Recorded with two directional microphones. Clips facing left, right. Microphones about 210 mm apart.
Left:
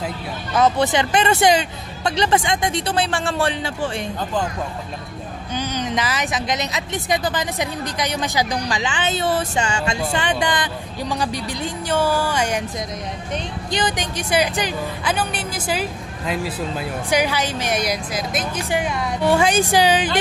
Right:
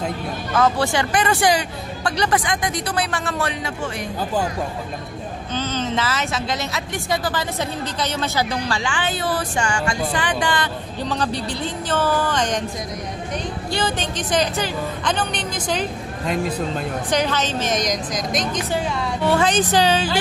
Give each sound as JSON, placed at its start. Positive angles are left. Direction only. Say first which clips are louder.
{"t": 0.5, "sound": "speech", "louder": "left 2 dB", "side_deg": 20}
{"t": 5.5, "sound": "a woman's voice", "louder": "even", "side_deg": 15}
{"t": 13.7, "sound": "a woman's voice", "louder": "left 1 dB", "side_deg": 15}